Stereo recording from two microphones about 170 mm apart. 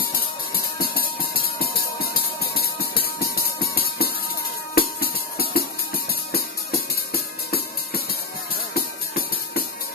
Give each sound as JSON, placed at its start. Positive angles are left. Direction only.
{"t": 0.6, "sound": "music", "side_deg": 65}
{"t": 7.1, "sound": "music", "side_deg": 65}